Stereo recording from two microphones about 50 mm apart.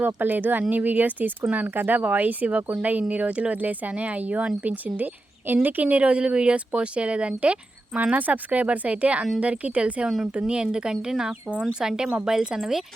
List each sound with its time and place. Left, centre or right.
0.0 s speech: right
5.5 s a woman's voice: right
5.8 s a woman's voice: right; by 12.8 s centre